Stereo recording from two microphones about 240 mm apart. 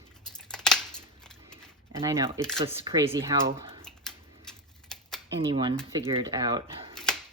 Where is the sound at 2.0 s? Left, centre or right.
Centre.